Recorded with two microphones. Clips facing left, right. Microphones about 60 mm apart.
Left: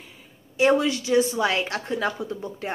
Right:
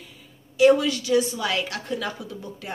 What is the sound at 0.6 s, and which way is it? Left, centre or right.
A woman's voice, left.